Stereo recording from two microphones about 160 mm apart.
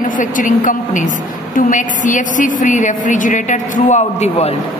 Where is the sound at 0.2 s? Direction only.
55° left (ahead or behind).